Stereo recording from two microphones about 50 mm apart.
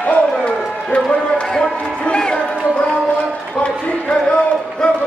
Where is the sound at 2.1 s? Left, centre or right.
Centre.